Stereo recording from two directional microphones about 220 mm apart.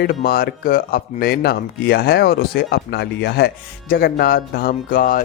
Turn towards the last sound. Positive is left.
turn(degrees=40)  # may be behind; listen again after turning